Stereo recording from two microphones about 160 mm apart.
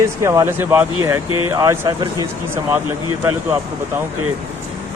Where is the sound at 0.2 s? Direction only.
20° right (ahead or behind).